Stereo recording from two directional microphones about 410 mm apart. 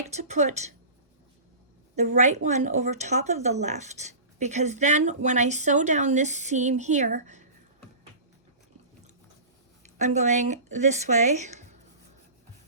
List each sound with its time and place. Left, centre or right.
0.1 s speech: centre
2.0 s speech: centre
9.8 s speech: centre